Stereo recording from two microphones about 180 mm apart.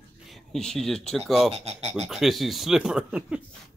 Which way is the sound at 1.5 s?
35° right (ahead or behind).